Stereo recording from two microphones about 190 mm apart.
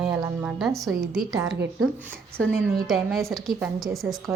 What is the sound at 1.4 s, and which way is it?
Speech, 85° right.